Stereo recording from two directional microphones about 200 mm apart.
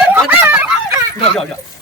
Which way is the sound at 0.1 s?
10° right (ahead or behind).